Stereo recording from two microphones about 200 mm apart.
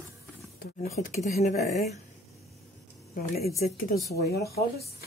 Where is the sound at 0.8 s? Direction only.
35° left (ahead or behind).